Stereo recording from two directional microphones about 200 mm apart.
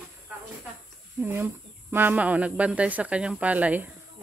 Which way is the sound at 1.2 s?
10° right (ahead or behind).